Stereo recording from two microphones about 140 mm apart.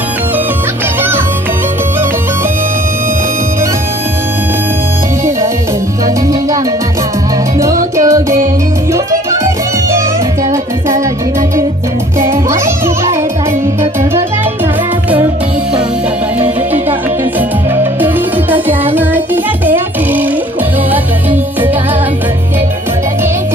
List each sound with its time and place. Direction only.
8.0 s music: 20° right (ahead or behind)
12.3 s music: 20° right (ahead or behind)
18.0 s music: 15° right (ahead or behind)